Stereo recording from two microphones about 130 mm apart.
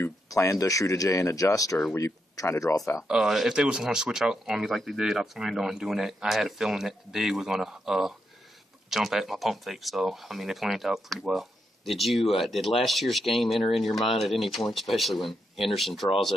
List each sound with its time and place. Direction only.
0.0 s speech: 25° left (ahead or behind)
3.1 s speech: 5° right (ahead or behind)